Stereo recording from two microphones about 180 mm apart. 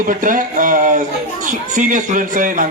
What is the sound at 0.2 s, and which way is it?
A man's voice, 50° right (ahead or behind).